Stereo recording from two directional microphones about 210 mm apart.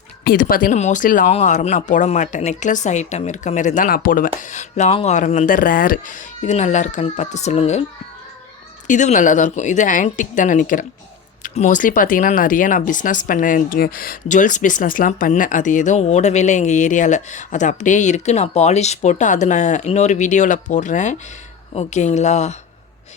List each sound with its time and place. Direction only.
0.3 s speech: 40° left (ahead or behind)
8.9 s speech: 35° left (ahead or behind)